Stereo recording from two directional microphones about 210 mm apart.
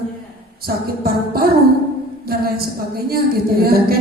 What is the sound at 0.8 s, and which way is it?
Speech, 45° right (ahead or behind).